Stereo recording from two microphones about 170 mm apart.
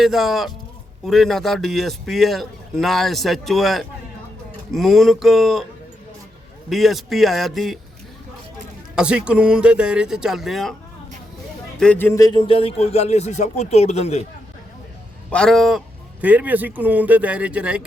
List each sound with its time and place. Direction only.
0.0 s a man's voice: centre (ahead or behind)
6.7 s a man's voice: centre (ahead or behind)
9.0 s a man's voice: 5° right (ahead or behind)
11.8 s speech: 10° left (ahead or behind); by 14.3 s 40° left (ahead or behind)
15.3 s a man's voice: 5° left (ahead or behind)